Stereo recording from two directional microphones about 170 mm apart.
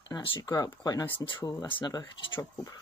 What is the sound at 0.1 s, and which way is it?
Speech, 25° left (ahead or behind).